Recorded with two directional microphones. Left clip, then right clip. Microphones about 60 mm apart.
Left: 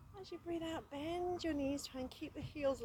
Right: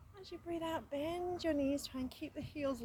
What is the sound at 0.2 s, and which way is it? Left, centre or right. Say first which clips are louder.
A woman's voice: right 2 dB; right.